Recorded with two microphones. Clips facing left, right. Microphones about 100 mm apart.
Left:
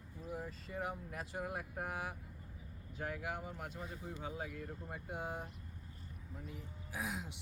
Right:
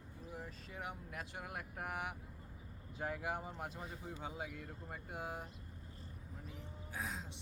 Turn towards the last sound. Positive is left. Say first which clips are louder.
# left 2 dB
turn(degrees=10)  # may be behind; listen again after turning